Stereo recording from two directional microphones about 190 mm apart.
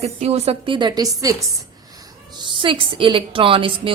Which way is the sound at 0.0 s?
35° right (ahead or behind).